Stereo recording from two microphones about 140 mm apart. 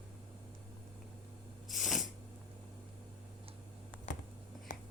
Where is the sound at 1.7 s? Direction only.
Centre (ahead or behind).